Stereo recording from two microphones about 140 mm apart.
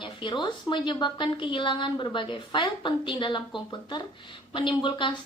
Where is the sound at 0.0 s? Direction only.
35° left (ahead or behind).